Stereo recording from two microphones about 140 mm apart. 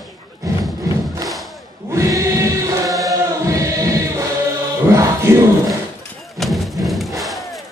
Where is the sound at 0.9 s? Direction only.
25° right (ahead or behind).